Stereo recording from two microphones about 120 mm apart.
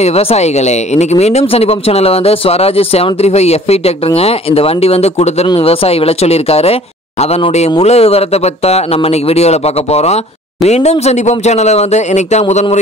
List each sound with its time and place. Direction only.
0.0 s speech: 60° left (ahead or behind)
9.3 s speech: 60° left (ahead or behind)